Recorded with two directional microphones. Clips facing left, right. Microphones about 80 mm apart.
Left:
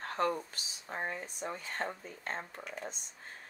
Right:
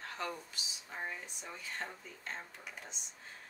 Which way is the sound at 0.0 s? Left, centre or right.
Left.